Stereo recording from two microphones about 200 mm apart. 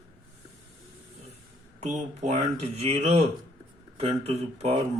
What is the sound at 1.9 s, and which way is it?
Speech, 40° right (ahead or behind).